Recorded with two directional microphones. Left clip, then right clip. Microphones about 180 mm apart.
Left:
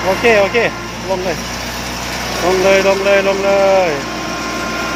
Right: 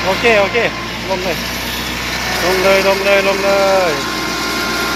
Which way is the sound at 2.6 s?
25° left (ahead or behind).